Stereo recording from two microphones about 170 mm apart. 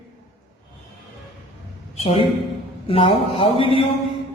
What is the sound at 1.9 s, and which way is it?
Speech, 35° left (ahead or behind).